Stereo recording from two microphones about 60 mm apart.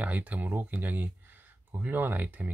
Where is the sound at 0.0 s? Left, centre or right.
Right.